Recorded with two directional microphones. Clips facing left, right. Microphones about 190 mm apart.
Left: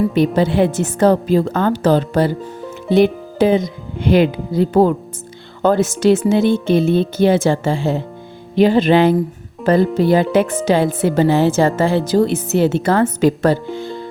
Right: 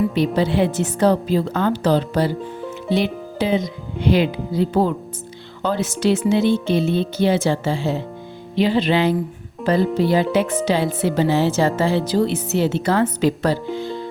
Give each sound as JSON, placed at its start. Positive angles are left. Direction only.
{"t": 0.3, "sound": "speech", "side_deg": 50}